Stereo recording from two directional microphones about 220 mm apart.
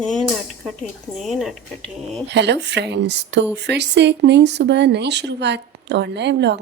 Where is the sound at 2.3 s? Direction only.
50° right (ahead or behind).